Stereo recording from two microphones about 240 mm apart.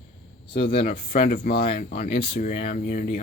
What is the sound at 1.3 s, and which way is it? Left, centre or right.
Speech, left.